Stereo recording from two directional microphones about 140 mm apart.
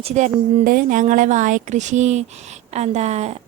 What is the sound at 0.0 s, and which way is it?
Speech, 50° right (ahead or behind).